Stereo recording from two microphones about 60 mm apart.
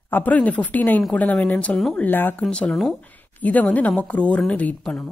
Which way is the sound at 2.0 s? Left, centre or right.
Left.